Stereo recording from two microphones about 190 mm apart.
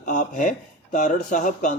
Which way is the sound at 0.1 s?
40° left (ahead or behind).